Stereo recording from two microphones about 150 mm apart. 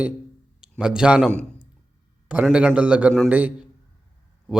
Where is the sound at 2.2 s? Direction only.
10° right (ahead or behind).